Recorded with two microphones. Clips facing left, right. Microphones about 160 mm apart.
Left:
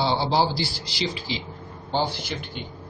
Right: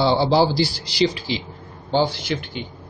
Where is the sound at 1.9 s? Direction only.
90° right.